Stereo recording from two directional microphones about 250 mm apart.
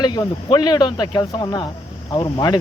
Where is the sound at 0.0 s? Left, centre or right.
Centre.